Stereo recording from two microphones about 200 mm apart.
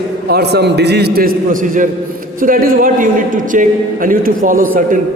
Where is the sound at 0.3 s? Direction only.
55° right (ahead or behind).